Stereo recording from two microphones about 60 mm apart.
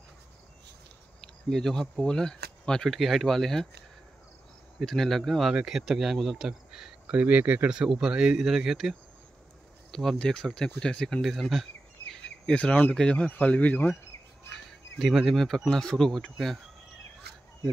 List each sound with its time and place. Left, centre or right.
1.2 s speech: centre
4.7 s speech: centre
5.5 s speech: centre
7.2 s speech: right
7.7 s speech: centre
9.8 s speech: centre
11.2 s speech: centre
12.1 s a sound: centre
12.9 s speech: centre
13.2 s speech: left
15.0 s speech: centre
15.4 s speech: centre